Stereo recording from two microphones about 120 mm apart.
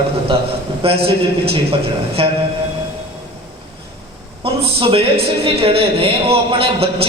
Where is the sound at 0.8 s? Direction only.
55° right (ahead or behind).